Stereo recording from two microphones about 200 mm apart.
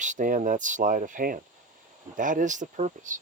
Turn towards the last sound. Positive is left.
turn(degrees=-40)  # may be behind; listen again after turning